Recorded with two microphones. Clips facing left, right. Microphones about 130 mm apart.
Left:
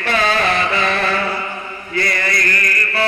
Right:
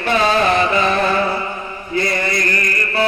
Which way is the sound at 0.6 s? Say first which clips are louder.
Right 3 dB; 25° right (ahead or behind).